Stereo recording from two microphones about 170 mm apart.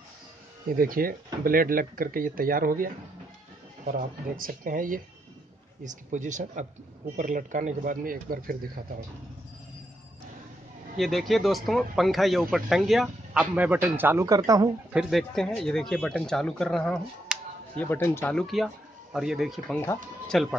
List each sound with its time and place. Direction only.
0.7 s speech: 60° right (ahead or behind)
11.0 s speech: centre (ahead or behind); by 14.7 s 20° right (ahead or behind)
14.9 s speech: 5° right (ahead or behind); by 18.3 s 15° left (ahead or behind)
18.3 s speech: centre (ahead or behind)
19.7 s speech: 15° left (ahead or behind)
20.3 s speech: centre (ahead or behind)